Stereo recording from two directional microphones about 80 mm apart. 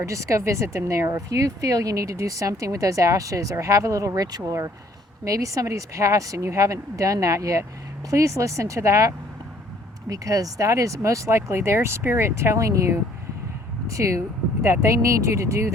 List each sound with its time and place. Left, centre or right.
0.0 s speech: right